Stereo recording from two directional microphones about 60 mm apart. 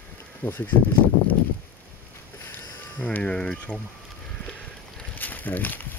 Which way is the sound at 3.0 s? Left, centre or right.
Centre.